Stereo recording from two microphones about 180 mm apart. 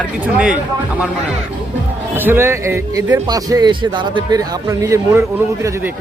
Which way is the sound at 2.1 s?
10° right (ahead or behind).